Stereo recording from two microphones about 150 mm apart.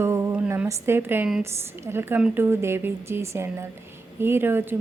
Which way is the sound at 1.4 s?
15° right (ahead or behind).